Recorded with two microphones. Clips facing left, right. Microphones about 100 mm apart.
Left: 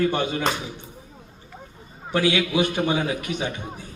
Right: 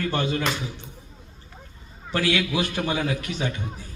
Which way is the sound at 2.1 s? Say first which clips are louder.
Left 2 dB; 15° left (ahead or behind).